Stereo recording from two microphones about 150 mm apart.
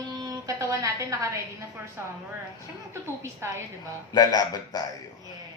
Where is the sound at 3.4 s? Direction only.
15° right (ahead or behind).